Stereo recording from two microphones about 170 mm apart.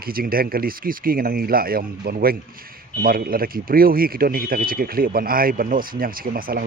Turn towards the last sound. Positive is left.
turn(degrees=-60)  # may be behind; listen again after turning